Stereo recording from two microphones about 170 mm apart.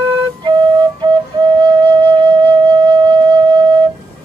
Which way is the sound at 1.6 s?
25° right (ahead or behind).